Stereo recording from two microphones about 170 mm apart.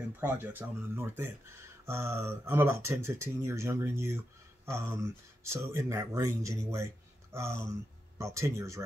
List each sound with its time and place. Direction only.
0.2 s speech: 10° right (ahead or behind)